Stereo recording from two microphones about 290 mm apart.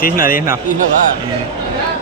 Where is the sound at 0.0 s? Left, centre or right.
Left.